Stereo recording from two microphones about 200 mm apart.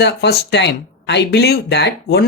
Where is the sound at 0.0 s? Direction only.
60° left (ahead or behind).